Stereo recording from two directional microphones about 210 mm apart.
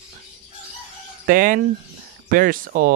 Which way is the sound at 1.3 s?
40° right (ahead or behind).